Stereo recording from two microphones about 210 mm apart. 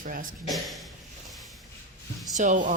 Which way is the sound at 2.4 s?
35° right (ahead or behind).